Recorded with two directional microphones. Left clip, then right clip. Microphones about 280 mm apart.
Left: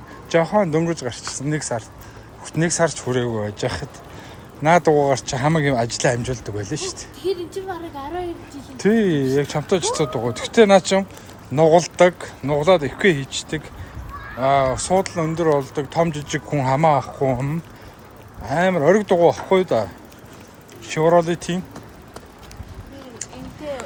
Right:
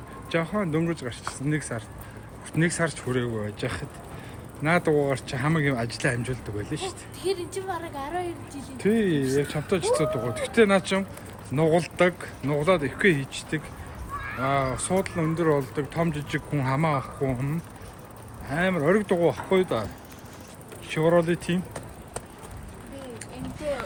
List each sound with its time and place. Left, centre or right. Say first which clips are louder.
0.3 s speech: left 10 dB; centre